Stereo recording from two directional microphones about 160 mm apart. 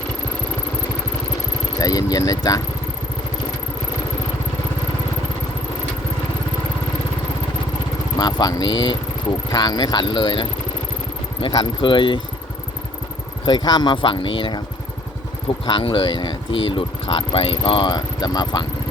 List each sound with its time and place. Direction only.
1.8 s speech: 20° left (ahead or behind)
8.2 s speech: 25° left (ahead or behind)
13.4 s speech: 25° left (ahead or behind)
15.6 s speech: 30° left (ahead or behind)